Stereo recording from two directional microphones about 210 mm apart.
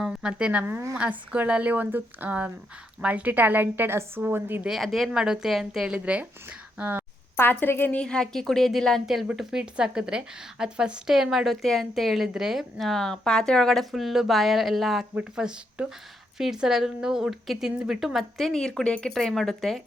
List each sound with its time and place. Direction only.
0.0 s a woman's voice: 5° right (ahead or behind)
7.3 s a woman's voice: 10° left (ahead or behind)